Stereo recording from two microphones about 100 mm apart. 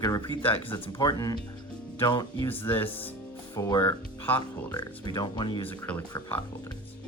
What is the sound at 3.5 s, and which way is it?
Speech, 35° left (ahead or behind).